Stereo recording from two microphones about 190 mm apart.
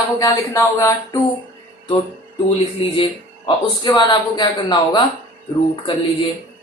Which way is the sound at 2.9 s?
25° left (ahead or behind).